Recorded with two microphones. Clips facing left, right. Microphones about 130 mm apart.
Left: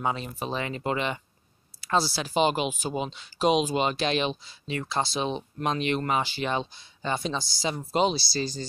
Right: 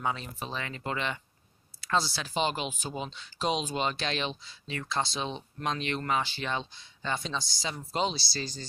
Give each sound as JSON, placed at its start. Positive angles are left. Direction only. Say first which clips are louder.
{"t": 0.0, "sound": "speech", "louder": "left 4 dB", "side_deg": 15}